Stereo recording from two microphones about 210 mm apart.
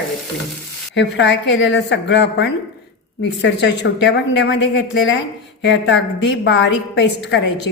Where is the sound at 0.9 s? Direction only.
55° left (ahead or behind).